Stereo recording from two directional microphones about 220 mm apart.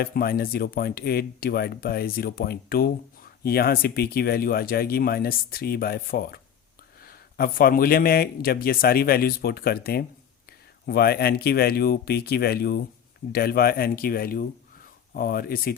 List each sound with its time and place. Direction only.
0.0 s a man's voice: 45° left (ahead or behind)